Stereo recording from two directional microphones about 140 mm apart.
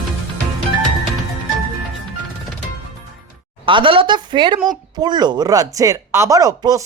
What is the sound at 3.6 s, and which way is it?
Speech, 35° right (ahead or behind).